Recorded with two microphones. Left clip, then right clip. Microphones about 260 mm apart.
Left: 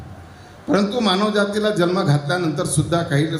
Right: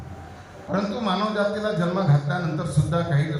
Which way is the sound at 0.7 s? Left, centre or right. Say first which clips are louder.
Left 7 dB; left.